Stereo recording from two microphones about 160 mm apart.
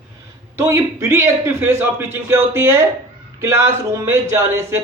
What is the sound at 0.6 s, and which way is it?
A man's voice, 20° right (ahead or behind).